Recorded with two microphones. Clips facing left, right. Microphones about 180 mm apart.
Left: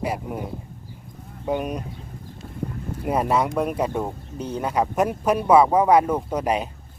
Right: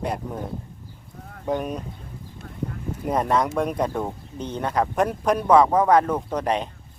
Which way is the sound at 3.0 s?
10° left (ahead or behind).